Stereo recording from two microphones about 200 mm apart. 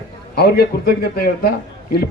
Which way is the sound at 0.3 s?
50° left (ahead or behind).